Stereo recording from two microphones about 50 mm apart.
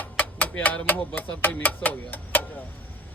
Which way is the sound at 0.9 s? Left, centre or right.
Left.